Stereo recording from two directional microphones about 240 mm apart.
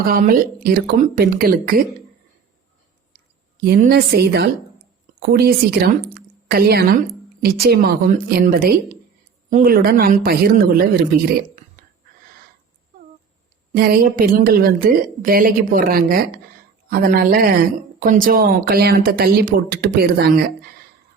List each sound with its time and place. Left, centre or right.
0.1 s speech: right
3.6 s speech: right
13.7 s speech: right